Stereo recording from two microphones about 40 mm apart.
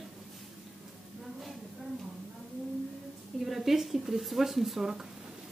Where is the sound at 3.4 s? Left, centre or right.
Centre.